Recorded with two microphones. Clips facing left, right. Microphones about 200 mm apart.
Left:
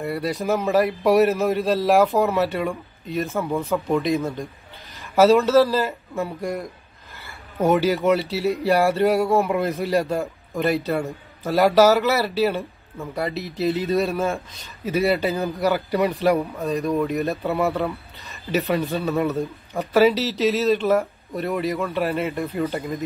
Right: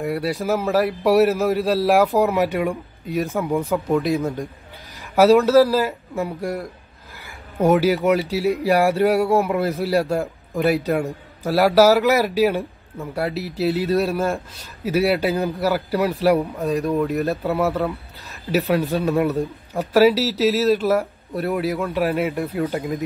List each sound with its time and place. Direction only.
0.0 s a man's voice: 15° right (ahead or behind)
0.3 s a man's voice: 5° right (ahead or behind)
5.4 s a man's voice: 10° right (ahead or behind)
8.0 s a man's voice: 10° right (ahead or behind)
16.9 s a man's voice: centre (ahead or behind)